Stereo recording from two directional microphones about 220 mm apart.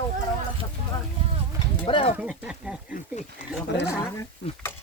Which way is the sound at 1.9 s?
25° left (ahead or behind).